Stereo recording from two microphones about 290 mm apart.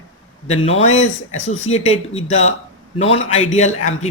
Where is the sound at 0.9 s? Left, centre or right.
Left.